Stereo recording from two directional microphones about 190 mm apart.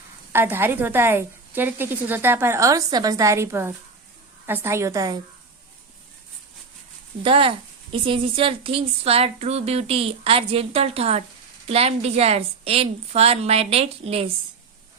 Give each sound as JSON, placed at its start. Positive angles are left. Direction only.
{"t": 0.3, "sound": "a woman's voice", "side_deg": -10}
{"t": 7.2, "sound": "speech", "side_deg": -30}